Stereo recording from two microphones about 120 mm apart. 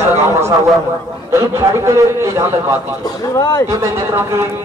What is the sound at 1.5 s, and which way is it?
A man's voice, 25° right (ahead or behind).